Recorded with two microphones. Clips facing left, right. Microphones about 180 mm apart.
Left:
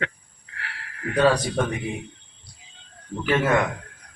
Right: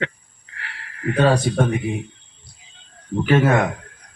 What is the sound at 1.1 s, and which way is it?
Speech, 50° right (ahead or behind).